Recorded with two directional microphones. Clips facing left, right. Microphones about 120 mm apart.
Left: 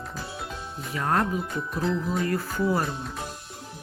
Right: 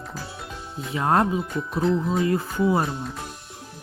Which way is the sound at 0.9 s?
25° right (ahead or behind).